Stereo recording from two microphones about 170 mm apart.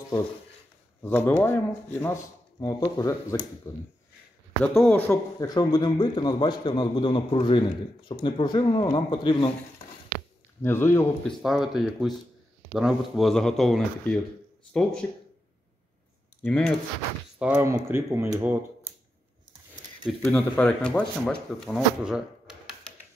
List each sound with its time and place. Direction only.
1.0 s a man's voice: 10° left (ahead or behind)
5.4 s a man's voice: 25° left (ahead or behind)
10.6 s speech: 15° left (ahead or behind)
11.2 s speech: centre (ahead or behind)
16.4 s speech: 5° left (ahead or behind)
17.4 s speech: 10° right (ahead or behind)
20.1 s speech: 10° left (ahead or behind)